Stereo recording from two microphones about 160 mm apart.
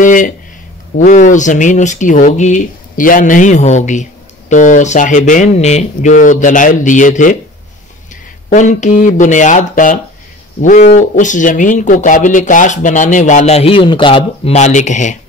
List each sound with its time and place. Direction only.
0.0 s speech: 55° left (ahead or behind)
8.5 s speech: 50° left (ahead or behind)